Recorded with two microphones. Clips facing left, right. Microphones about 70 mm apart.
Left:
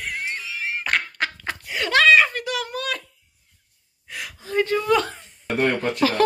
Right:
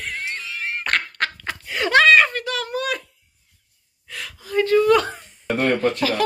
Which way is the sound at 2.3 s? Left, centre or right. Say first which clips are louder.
Right 1 dB; centre.